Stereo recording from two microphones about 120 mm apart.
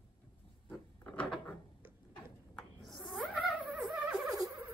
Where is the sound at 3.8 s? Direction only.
5° right (ahead or behind).